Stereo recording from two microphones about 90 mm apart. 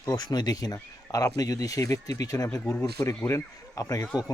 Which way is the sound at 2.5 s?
15° left (ahead or behind).